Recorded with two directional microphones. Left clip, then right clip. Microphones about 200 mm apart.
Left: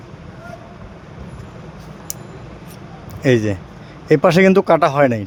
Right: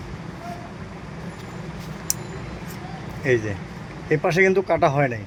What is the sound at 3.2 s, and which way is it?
Speech, 55° left (ahead or behind).